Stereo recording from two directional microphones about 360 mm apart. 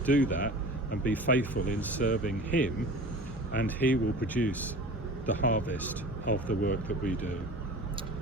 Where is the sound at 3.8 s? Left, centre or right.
Centre.